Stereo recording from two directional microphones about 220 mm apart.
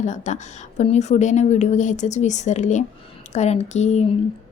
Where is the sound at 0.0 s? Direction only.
35° left (ahead or behind).